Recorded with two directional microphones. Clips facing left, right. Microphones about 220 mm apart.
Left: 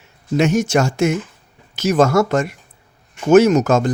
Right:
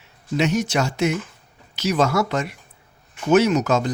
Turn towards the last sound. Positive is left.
turn(degrees=50)  # may be behind; listen again after turning